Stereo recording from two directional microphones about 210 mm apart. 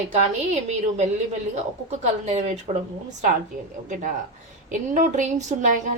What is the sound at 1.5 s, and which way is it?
A woman's voice, 30° right (ahead or behind).